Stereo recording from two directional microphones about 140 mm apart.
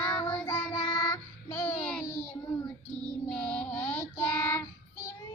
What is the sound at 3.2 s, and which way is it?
Child singing, 10° left (ahead or behind).